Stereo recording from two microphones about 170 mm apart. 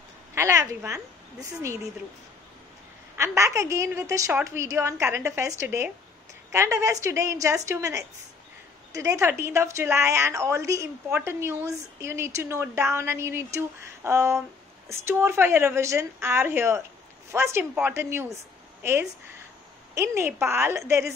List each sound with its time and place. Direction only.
0.3 s a woman's voice: 15° right (ahead or behind)
3.2 s a woman's voice: 15° right (ahead or behind)